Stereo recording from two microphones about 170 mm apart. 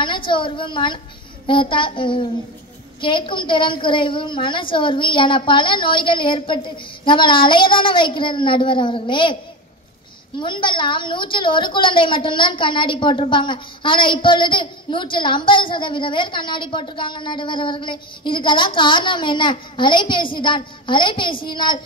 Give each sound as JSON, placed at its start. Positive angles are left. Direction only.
{"t": 0.0, "sound": "a woman's voice", "side_deg": 30}
{"t": 10.4, "sound": "a woman's voice", "side_deg": 30}